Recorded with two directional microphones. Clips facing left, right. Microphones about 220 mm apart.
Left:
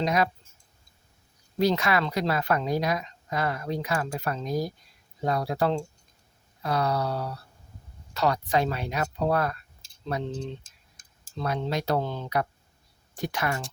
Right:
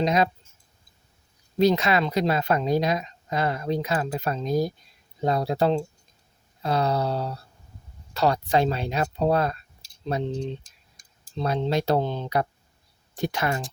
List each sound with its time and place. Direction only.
0.0 s a woman's voice: 20° right (ahead or behind)
1.5 s a woman's voice: 20° right (ahead or behind)
10.3 s speech: 15° right (ahead or behind)
11.3 s a woman's voice: 25° right (ahead or behind)